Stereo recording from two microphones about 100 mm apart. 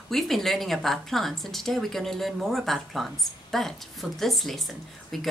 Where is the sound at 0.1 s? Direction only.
Centre (ahead or behind).